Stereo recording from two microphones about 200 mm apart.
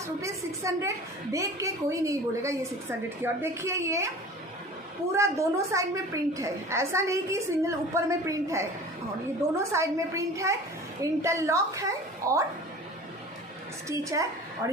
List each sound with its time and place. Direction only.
0.2 s a woman's voice: 15° right (ahead or behind)
5.1 s a woman's voice: 15° right (ahead or behind)
13.8 s a woman's voice: 15° right (ahead or behind)